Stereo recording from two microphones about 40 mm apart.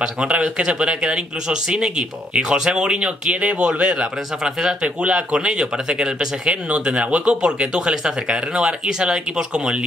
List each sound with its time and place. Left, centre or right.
0.0 s speech: right